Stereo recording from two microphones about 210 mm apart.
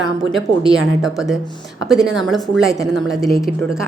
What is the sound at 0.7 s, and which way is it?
A woman's voice, centre (ahead or behind).